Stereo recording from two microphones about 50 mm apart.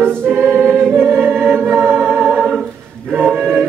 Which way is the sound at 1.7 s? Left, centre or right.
Centre.